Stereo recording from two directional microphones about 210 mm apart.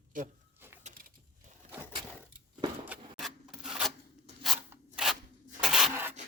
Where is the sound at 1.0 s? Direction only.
40° right (ahead or behind).